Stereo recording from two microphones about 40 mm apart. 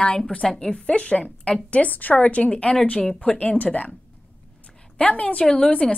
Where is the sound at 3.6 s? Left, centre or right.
Left.